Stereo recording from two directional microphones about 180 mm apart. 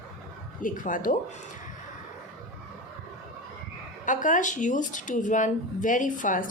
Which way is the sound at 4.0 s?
45° left (ahead or behind).